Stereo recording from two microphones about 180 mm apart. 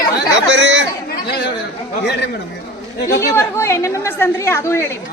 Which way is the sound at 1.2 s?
65° left (ahead or behind).